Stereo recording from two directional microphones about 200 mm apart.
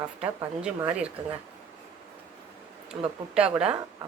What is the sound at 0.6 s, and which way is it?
Speech, 5° right (ahead or behind).